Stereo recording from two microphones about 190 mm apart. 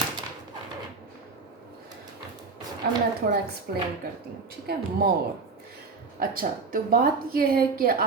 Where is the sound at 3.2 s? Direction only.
50° right (ahead or behind).